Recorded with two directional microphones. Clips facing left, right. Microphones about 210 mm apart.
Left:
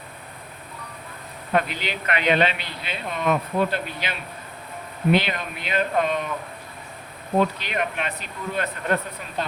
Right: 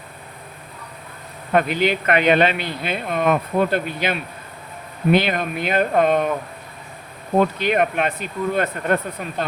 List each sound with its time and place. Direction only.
1.5 s speech: 50° right (ahead or behind)
7.3 s speech: 50° right (ahead or behind)